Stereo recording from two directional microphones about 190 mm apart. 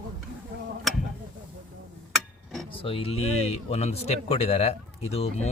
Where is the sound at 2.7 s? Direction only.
30° left (ahead or behind).